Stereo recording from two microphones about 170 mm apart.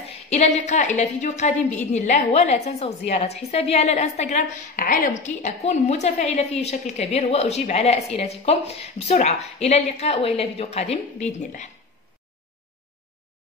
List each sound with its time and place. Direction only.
0.3 s a woman's voice: 40° left (ahead or behind)